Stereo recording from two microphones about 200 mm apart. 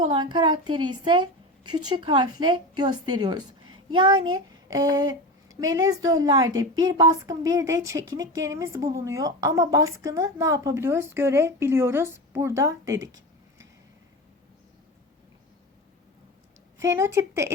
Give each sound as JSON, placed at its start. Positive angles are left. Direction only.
{"t": 0.1, "sound": "a woman's voice", "side_deg": -20}
{"t": 4.4, "sound": "a sound", "side_deg": -20}
{"t": 5.7, "sound": "a woman's voice", "side_deg": -15}
{"t": 16.8, "sound": "a woman's voice", "side_deg": -15}